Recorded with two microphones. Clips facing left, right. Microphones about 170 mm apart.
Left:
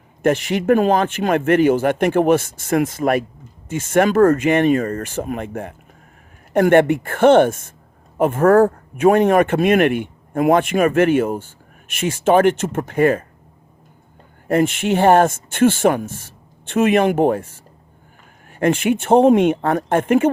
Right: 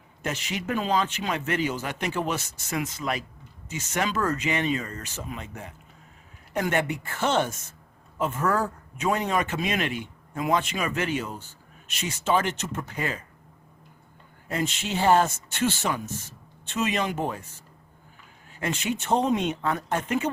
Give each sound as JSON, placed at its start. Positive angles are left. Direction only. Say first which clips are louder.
{"t": 0.2, "sound": "speech", "louder": "left 14 dB", "side_deg": 55}
{"t": 14.4, "sound": "speech", "louder": "left 12 dB", "side_deg": 55}
{"t": 18.4, "sound": "speech", "louder": "left 12 dB", "side_deg": 60}